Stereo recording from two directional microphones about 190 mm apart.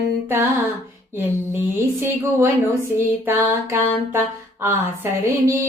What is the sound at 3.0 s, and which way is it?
Female singing, 10° right (ahead or behind).